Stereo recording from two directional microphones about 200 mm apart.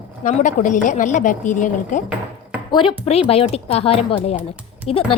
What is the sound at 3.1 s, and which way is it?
A woman's voice, 30° left (ahead or behind).